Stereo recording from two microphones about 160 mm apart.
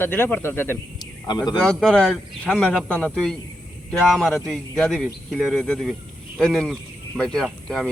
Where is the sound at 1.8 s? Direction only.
5° left (ahead or behind).